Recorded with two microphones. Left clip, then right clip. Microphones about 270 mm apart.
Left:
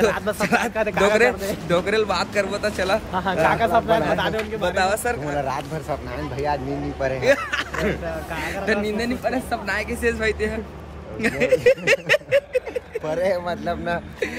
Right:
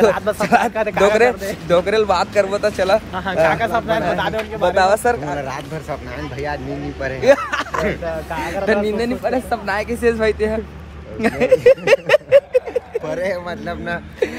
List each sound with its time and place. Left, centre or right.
0.0 s speech: centre
3.4 s speech: centre
4.0 s speech: centre
5.4 s speech: centre
7.2 s speech: centre
13.0 s speech: centre